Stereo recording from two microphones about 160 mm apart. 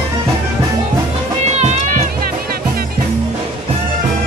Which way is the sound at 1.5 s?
45° right (ahead or behind).